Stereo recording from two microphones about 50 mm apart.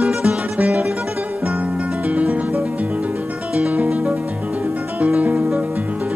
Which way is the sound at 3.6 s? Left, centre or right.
Right.